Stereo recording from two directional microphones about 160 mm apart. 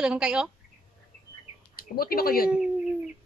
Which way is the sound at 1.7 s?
70° left (ahead or behind).